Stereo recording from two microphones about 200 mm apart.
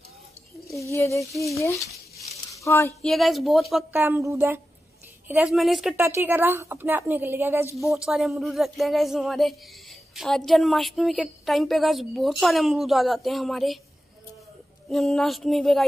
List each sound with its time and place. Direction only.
0.8 s speech: 15° left (ahead or behind)
1.6 s a sound: 15° left (ahead or behind)
3.0 s a woman's voice: centre (ahead or behind)
4.0 s a woman's voice: 15° right (ahead or behind)
6.0 s a woman's voice: 10° right (ahead or behind)
14.9 s a woman's voice: centre (ahead or behind)